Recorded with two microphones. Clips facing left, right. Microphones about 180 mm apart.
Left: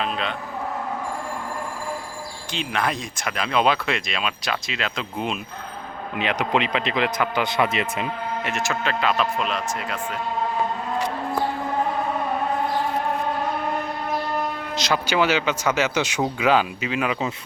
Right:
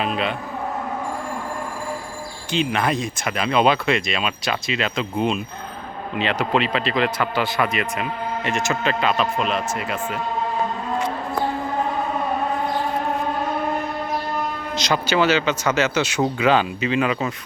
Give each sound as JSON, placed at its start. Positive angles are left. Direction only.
{"t": 0.0, "sound": "a man's voice", "side_deg": -5}
{"t": 2.5, "sound": "speech", "side_deg": 0}
{"t": 6.1, "sound": "speech", "side_deg": 15}
{"t": 8.4, "sound": "speech", "side_deg": 0}
{"t": 14.8, "sound": "speech", "side_deg": 5}